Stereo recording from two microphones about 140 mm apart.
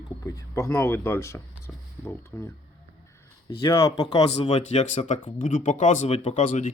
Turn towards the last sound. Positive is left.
turn(degrees=60)  # may be behind; listen again after turning